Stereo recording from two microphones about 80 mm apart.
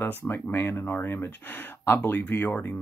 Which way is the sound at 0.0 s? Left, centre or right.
Left.